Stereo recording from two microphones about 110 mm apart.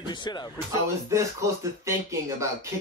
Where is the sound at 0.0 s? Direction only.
45° left (ahead or behind).